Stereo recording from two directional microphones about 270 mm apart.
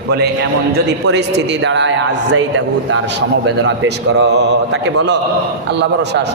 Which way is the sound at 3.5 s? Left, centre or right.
Right.